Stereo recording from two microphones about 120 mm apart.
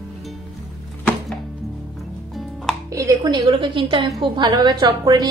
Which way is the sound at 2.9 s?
25° right (ahead or behind).